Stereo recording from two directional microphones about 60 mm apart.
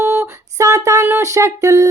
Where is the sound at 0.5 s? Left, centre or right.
Right.